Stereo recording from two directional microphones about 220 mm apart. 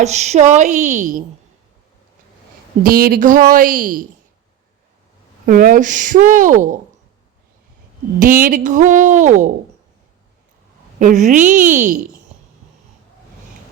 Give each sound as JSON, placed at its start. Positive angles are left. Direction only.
{"t": 0.0, "sound": "speech", "side_deg": -30}
{"t": 2.8, "sound": "speech", "side_deg": -40}
{"t": 5.5, "sound": "speech", "side_deg": -40}
{"t": 8.2, "sound": "speech", "side_deg": -40}
{"t": 11.0, "sound": "speech", "side_deg": -35}